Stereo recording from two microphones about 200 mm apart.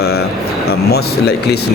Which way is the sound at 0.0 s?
55° left (ahead or behind).